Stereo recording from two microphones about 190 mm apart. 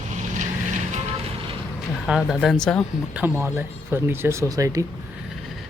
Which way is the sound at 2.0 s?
Centre (ahead or behind).